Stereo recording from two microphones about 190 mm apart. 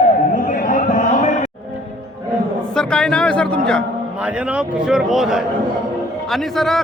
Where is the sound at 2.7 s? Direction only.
5° left (ahead or behind).